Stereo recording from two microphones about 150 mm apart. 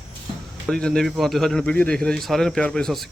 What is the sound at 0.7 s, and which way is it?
Speech, 5° left (ahead or behind).